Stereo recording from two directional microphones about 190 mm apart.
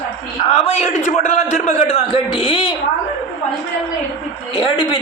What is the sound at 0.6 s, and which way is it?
A man's voice, 35° left (ahead or behind).